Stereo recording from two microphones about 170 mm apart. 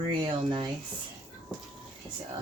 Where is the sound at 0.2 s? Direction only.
30° right (ahead or behind).